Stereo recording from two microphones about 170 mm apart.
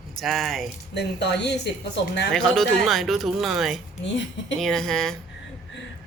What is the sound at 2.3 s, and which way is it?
Speech, 5° left (ahead or behind).